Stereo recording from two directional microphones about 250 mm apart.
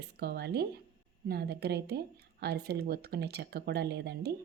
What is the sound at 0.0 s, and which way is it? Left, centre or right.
Speech, right.